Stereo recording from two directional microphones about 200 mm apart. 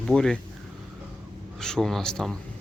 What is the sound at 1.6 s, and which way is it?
Speech, 5° left (ahead or behind).